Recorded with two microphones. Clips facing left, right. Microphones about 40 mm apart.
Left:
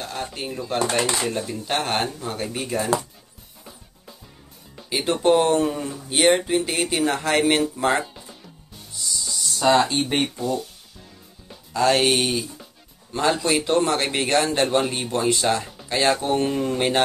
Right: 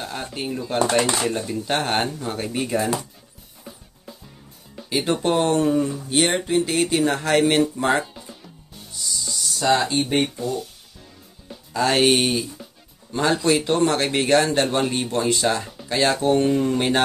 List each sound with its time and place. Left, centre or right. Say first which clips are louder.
0.0 s a man's voice: right 1 dB; centre
4.7 s music: right 1 dB; centre
5.2 s a man's voice: left 3 dB; centre
9.0 s music: even; centre
9.9 s speech: right 2 dB; left
11.7 s a man's voice: right 1 dB; centre